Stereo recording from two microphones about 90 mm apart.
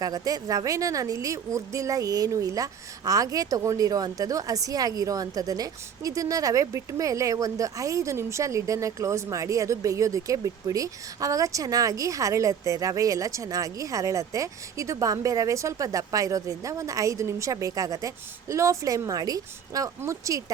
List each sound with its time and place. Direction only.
0.0 s a woman's voice: 45° right (ahead or behind)